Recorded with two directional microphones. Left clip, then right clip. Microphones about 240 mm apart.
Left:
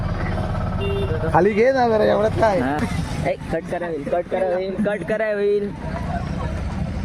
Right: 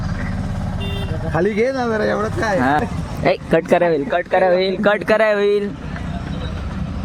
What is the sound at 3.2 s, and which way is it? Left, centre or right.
Speech, right.